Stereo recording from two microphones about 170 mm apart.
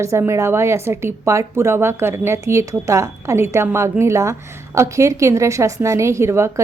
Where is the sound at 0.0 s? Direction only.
15° right (ahead or behind).